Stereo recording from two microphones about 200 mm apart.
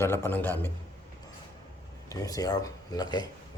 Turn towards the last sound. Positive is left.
turn(degrees=20)  # may be behind; listen again after turning